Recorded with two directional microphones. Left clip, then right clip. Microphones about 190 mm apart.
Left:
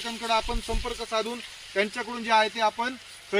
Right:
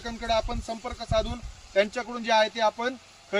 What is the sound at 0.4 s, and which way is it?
Speech, 25° right (ahead or behind).